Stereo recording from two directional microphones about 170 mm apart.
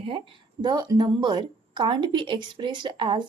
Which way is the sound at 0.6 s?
25° right (ahead or behind).